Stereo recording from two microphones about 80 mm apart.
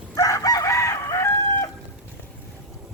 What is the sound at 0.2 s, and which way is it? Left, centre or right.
Chicken, left.